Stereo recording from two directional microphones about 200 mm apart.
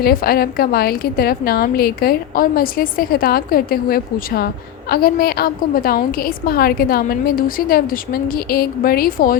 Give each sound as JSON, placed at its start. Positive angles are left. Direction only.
{"t": 0.0, "sound": "a woman's voice", "side_deg": 50}